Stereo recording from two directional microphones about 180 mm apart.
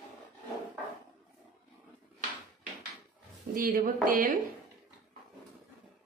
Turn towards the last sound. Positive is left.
turn(degrees=-50)  # may be behind; listen again after turning